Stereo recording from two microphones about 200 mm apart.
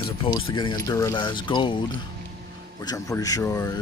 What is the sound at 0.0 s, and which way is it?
Speech, 25° left (ahead or behind).